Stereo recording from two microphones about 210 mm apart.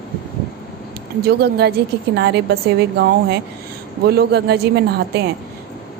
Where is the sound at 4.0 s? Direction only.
50° right (ahead or behind).